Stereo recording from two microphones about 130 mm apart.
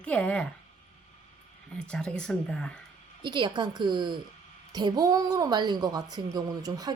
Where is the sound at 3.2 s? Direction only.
35° right (ahead or behind).